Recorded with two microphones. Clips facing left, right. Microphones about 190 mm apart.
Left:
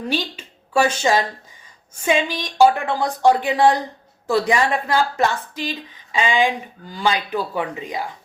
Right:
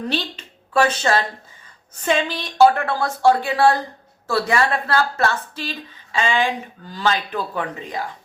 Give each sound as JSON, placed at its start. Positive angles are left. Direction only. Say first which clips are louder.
{"t": 0.1, "sound": "a woman's voice", "louder": "left 1 dB", "side_deg": 10}